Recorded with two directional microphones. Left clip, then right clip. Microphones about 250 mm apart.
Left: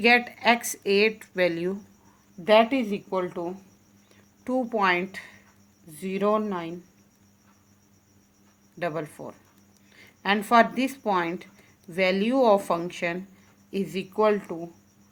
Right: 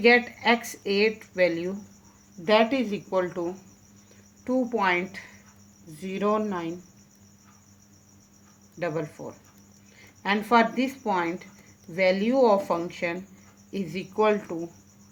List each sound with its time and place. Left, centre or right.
0.0 s speech: left
8.8 s speech: left